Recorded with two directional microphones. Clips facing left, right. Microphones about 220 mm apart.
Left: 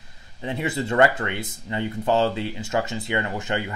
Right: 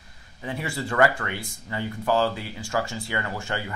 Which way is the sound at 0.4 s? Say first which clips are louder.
Left 4 dB; 20° left (ahead or behind).